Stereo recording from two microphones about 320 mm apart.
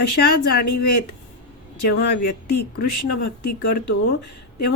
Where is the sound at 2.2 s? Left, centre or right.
Left.